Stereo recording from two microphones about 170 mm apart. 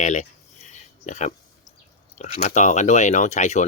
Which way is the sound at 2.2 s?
40° left (ahead or behind).